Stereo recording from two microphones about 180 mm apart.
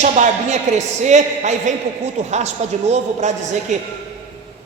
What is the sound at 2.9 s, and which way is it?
Speech, 40° right (ahead or behind).